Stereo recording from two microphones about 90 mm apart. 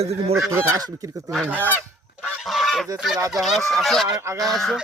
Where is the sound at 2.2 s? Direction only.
Centre (ahead or behind).